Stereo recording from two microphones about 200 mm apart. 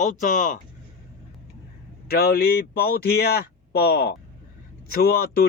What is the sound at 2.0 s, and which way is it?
Speech, 50° left (ahead or behind).